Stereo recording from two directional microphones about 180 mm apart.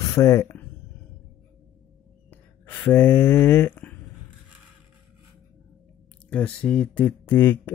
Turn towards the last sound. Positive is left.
turn(degrees=10)  # may be behind; listen again after turning